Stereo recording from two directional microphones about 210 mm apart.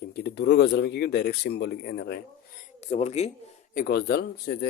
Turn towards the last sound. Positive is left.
turn(degrees=50)  # may be behind; listen again after turning